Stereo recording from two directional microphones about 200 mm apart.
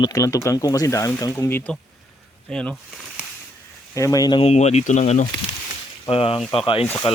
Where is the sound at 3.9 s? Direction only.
15° left (ahead or behind).